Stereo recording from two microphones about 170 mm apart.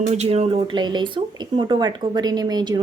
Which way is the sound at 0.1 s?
40° right (ahead or behind).